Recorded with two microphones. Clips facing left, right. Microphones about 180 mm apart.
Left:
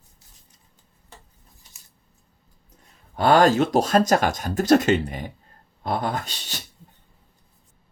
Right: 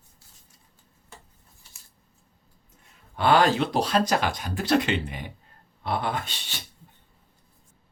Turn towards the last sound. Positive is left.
turn(degrees=40)  # may be behind; listen again after turning